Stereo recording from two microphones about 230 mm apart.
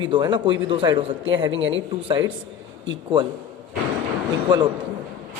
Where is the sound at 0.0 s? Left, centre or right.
Centre.